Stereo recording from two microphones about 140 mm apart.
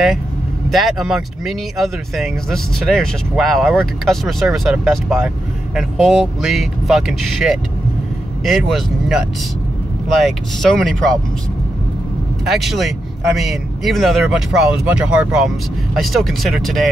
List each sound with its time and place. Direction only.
0.7 s speech: centre (ahead or behind)
10.2 s speech: centre (ahead or behind)
12.4 s speech: centre (ahead or behind)